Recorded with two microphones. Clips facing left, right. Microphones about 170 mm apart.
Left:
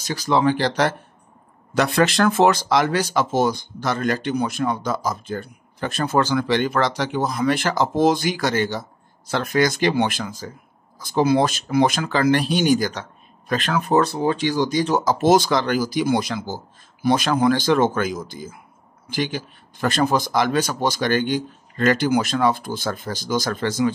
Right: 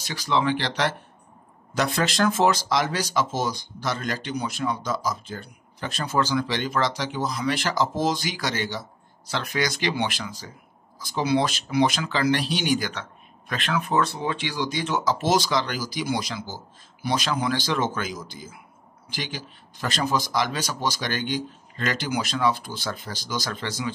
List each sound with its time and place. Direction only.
0.0 s speech: 45° left (ahead or behind)
1.8 s speech: 65° left (ahead or behind)